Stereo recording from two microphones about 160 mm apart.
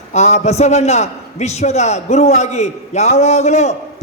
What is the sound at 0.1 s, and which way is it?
A man's voice, 45° left (ahead or behind).